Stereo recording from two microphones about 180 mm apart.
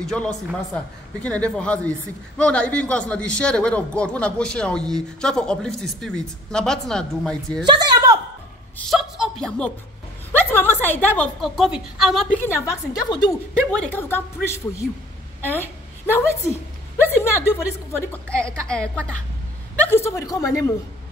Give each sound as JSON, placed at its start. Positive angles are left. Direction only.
{"t": 0.0, "sound": "a man's voice", "side_deg": 5}
{"t": 7.6, "sound": "a woman's voice", "side_deg": -25}
{"t": 8.7, "sound": "a sound", "side_deg": 0}
{"t": 10.3, "sound": "a woman's voice", "side_deg": 10}
{"t": 11.4, "sound": "a man's voice", "side_deg": 0}
{"t": 12.4, "sound": "a woman's voice", "side_deg": 20}
{"t": 13.7, "sound": "a woman's voice", "side_deg": 5}